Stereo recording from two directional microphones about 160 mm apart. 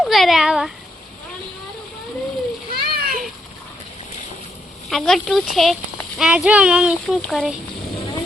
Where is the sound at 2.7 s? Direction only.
70° right (ahead or behind).